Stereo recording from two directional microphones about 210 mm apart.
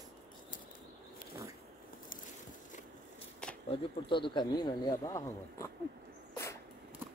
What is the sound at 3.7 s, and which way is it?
Speech, 25° left (ahead or behind).